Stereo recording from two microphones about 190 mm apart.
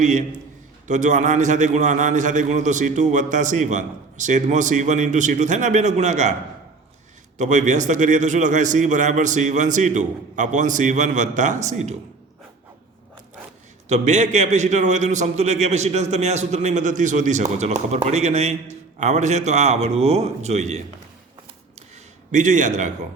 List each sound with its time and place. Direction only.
0.0 s a man's voice: 40° right (ahead or behind)
7.3 s a man's voice: 40° right (ahead or behind)
13.8 s a man's voice: 35° right (ahead or behind)
22.3 s a man's voice: 40° right (ahead or behind)